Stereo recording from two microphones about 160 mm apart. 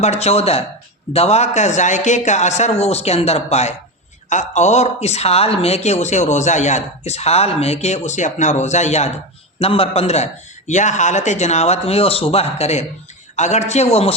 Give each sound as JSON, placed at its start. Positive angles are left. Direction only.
{"t": 0.0, "sound": "a man's voice", "side_deg": 40}